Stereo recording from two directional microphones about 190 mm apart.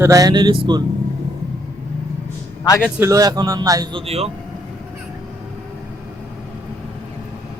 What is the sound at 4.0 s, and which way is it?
Speech, 30° right (ahead or behind).